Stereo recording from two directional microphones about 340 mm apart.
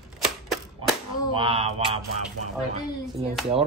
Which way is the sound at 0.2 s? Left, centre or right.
Centre.